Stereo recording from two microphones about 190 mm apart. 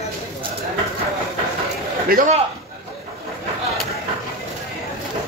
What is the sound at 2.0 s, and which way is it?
Speech, 50° right (ahead or behind).